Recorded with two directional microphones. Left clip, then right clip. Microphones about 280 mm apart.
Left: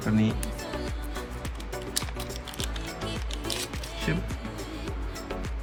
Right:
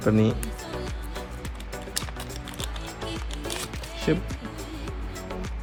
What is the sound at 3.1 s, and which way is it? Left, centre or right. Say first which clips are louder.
Music: right 1 dB; centre.